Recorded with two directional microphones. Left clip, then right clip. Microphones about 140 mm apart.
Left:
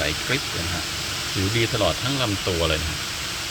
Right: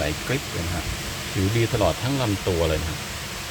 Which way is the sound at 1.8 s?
20° right (ahead or behind).